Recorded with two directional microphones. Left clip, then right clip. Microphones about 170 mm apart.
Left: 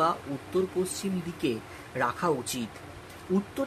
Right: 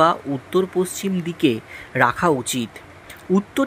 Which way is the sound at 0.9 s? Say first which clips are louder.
Right 8 dB; 55° right (ahead or behind).